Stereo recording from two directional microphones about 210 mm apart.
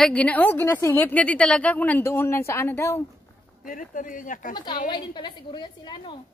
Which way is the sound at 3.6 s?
40° left (ahead or behind).